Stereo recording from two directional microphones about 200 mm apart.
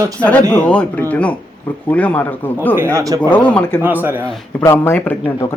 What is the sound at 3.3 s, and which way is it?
Speech, 5° left (ahead or behind).